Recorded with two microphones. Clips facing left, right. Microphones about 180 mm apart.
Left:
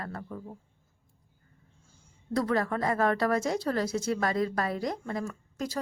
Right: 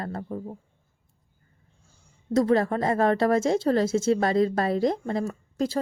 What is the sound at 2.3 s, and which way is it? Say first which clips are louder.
A woman's voice: right 6 dB; 25° right (ahead or behind).